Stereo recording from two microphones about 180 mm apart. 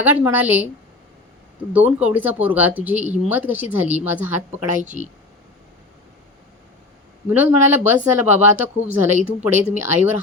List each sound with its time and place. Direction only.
0.0 s speech: 10° right (ahead or behind)
1.7 s speech: 10° right (ahead or behind)
4.8 s speech: 45° right (ahead or behind)
7.3 s speech: 10° right (ahead or behind)